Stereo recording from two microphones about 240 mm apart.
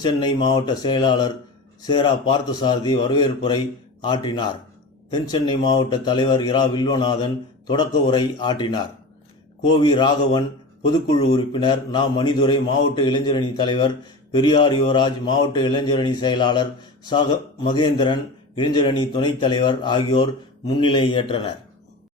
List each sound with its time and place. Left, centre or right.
0.0 s a man's voice: centre